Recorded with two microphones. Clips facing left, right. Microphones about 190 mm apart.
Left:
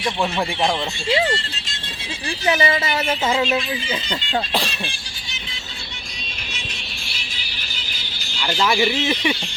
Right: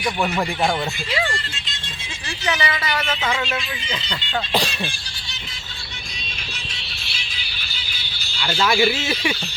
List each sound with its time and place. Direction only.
0.0 s speech: centre (ahead or behind)
1.1 s speech: 25° left (ahead or behind)
2.5 s speech: 25° left (ahead or behind)
8.3 s speech: 15° left (ahead or behind)